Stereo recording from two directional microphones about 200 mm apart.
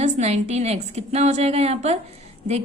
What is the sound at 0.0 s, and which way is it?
A woman's voice, 35° right (ahead or behind).